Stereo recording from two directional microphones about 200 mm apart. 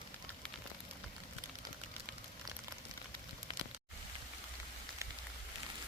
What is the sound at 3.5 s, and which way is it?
Rain on surface, 25° left (ahead or behind).